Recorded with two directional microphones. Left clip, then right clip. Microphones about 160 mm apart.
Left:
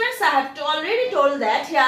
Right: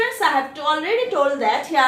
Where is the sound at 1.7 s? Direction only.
50° right (ahead or behind).